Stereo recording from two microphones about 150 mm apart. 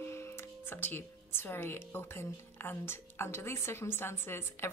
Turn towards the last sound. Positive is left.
turn(degrees=15)  # may be behind; listen again after turning